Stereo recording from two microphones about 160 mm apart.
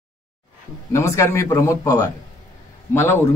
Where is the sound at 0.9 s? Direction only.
20° left (ahead or behind).